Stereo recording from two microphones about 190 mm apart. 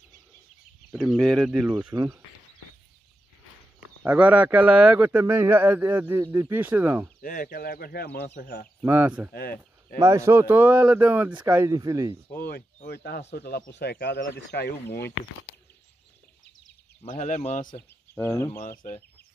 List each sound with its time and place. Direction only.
0.9 s speech: centre (ahead or behind)
4.0 s speech: 10° right (ahead or behind)
7.2 s speech: 50° left (ahead or behind)
8.4 s speech: 45° left (ahead or behind)
8.8 s speech: 10° right (ahead or behind)
9.3 s speech: 55° left (ahead or behind)
9.9 s speech: 15° right (ahead or behind)
12.3 s speech: 55° left (ahead or behind)
17.0 s speech: 35° left (ahead or behind)
17.7 s speech: 10° left (ahead or behind)